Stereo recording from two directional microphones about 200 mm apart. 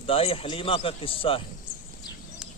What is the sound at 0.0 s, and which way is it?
Speech, 30° left (ahead or behind).